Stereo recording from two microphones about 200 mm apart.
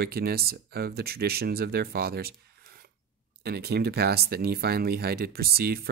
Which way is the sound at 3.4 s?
55° right (ahead or behind).